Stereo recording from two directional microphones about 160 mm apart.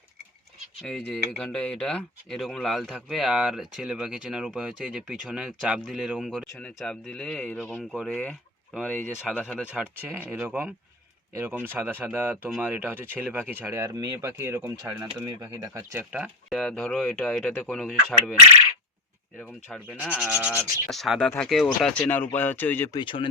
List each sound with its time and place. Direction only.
0.9 s speech: 5° left (ahead or behind)
9.6 s speech: 10° right (ahead or behind)
16.1 s speech: 5° right (ahead or behind)
19.9 s speech: 10° right (ahead or behind)
20.9 s speech: centre (ahead or behind)
23.0 s speech: 30° left (ahead or behind)